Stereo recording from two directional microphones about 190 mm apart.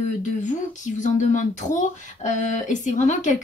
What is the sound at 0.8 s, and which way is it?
Speech, 40° left (ahead or behind).